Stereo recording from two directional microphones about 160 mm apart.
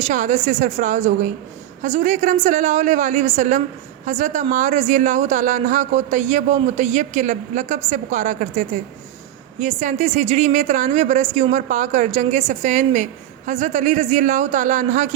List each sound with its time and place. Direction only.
0.0 s speech: 50° right (ahead or behind)